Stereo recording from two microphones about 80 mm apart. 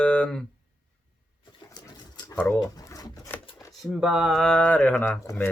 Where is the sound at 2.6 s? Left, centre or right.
Left.